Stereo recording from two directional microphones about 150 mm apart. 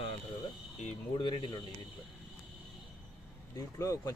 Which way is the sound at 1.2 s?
35° left (ahead or behind).